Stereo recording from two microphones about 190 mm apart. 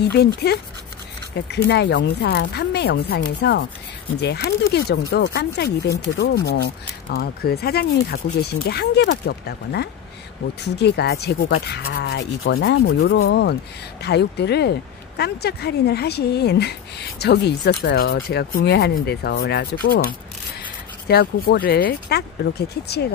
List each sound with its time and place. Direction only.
0.1 s speech: 55° left (ahead or behind)